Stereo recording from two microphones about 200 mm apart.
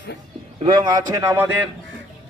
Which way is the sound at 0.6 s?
20° right (ahead or behind).